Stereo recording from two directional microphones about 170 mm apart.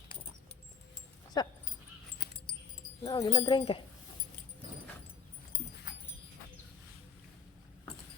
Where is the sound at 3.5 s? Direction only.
30° left (ahead or behind).